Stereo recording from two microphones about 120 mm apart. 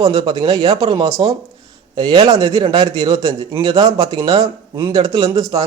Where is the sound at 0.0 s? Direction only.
35° right (ahead or behind).